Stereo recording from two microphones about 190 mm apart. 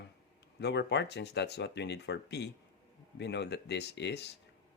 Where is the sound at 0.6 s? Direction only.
65° left (ahead or behind).